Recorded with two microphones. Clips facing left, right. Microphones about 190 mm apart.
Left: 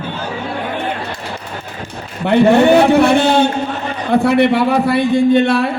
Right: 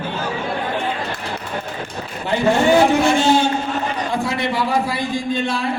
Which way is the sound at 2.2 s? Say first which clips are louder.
Left 7 dB; 60° left (ahead or behind).